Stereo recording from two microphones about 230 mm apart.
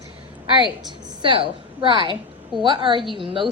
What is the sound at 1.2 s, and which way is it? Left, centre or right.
A woman's voice, right.